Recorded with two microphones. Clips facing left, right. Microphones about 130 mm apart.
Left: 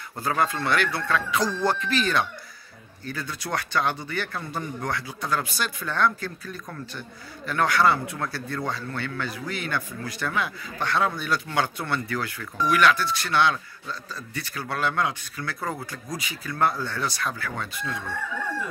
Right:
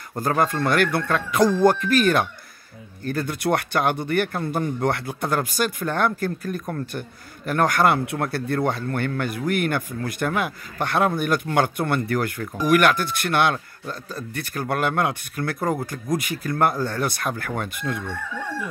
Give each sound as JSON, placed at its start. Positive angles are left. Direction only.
{"t": 0.1, "sound": "a man's voice", "side_deg": -40}